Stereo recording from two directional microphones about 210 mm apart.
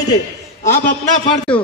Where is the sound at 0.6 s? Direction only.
40° left (ahead or behind).